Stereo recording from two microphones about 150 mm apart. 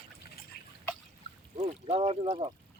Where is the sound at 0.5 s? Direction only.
90° left.